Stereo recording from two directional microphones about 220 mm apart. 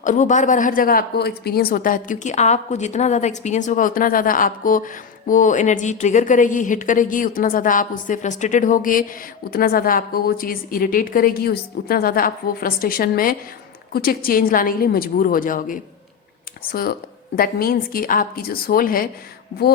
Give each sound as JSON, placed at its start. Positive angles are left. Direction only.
{"t": 0.0, "sound": "speech", "side_deg": 35}
{"t": 17.3, "sound": "speech", "side_deg": 40}